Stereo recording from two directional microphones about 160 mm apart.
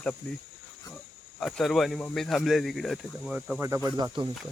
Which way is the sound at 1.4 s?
Centre (ahead or behind).